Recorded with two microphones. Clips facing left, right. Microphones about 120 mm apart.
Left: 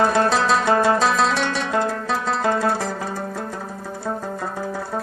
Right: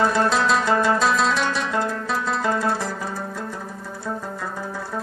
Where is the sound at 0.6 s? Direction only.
55° left (ahead or behind).